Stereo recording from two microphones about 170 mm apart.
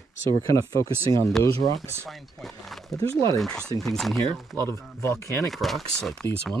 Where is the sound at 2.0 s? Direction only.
Centre (ahead or behind).